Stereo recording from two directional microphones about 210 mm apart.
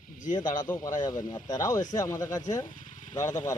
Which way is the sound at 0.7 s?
10° left (ahead or behind).